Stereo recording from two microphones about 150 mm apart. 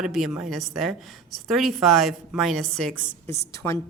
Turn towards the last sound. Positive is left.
turn(degrees=15)  # may be behind; listen again after turning